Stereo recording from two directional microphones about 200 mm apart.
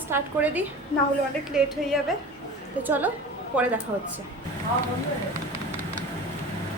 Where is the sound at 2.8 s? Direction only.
10° right (ahead or behind).